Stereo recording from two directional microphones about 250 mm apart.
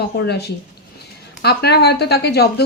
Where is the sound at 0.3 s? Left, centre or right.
Left.